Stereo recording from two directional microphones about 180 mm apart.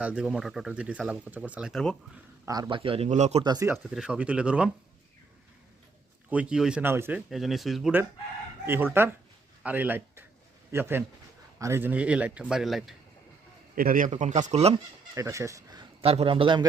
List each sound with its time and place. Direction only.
0.0 s speech: 5° right (ahead or behind)
2.5 s a man's voice: 25° right (ahead or behind)
3.4 s speech: 20° right (ahead or behind)
3.9 s speech: 5° right (ahead or behind)
6.3 s a man's voice: 5° right (ahead or behind)
7.3 s speech: centre (ahead or behind)
8.6 s a man's voice: 10° right (ahead or behind)
13.7 s a man's voice: 50° right (ahead or behind)
14.2 s a man's voice: 40° right (ahead or behind)
15.1 s speech: 15° right (ahead or behind)